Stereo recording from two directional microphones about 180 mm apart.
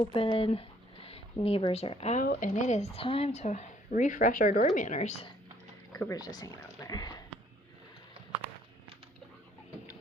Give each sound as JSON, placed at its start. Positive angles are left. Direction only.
{"t": 0.1, "sound": "speech", "side_deg": 30}
{"t": 2.2, "sound": "speech", "side_deg": 50}
{"t": 5.9, "sound": "speech", "side_deg": 20}